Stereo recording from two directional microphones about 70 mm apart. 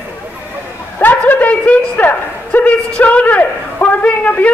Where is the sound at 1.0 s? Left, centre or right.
Left.